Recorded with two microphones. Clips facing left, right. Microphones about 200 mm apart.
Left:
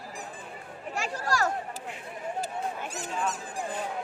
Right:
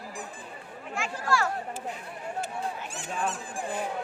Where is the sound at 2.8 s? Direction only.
40° left (ahead or behind).